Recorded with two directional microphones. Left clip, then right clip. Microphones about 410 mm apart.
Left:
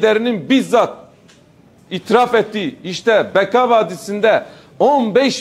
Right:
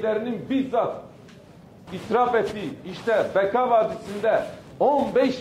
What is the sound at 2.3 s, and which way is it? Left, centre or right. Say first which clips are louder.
A man's voice: left 8 dB; left.